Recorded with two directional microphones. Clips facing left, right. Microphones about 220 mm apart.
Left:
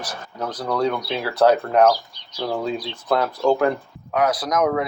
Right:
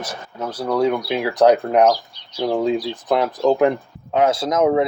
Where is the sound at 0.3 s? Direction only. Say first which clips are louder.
Right 3 dB; 10° right (ahead or behind).